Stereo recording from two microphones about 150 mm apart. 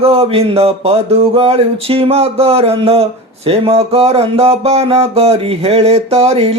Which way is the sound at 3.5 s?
40° right (ahead or behind).